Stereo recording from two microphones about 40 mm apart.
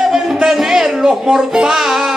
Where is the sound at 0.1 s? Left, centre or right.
Centre.